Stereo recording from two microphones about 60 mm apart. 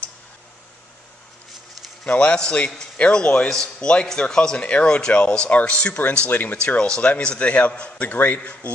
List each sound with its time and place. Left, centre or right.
2.0 s a man's voice: centre
6.6 s a man's voice: centre